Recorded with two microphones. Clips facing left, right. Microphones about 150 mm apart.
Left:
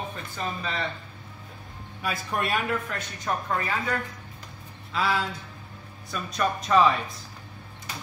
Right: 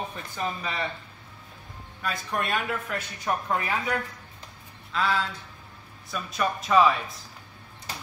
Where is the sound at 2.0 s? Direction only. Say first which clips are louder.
Left 1 dB; 5° left (ahead or behind); by 4.0 s 15° right (ahead or behind).